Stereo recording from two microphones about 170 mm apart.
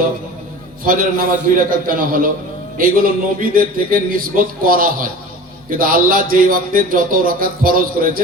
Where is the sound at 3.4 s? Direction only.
55° right (ahead or behind).